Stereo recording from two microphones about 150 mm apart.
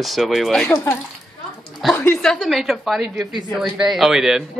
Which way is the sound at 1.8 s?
10° left (ahead or behind).